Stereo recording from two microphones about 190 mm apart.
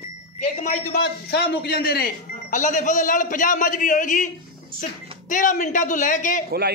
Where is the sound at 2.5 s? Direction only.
40° left (ahead or behind).